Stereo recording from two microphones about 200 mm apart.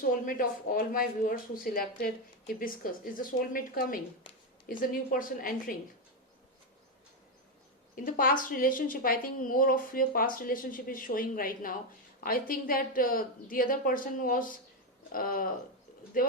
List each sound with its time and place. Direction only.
0.0 s a woman's voice: 45° left (ahead or behind)
7.9 s a woman's voice: 45° left (ahead or behind)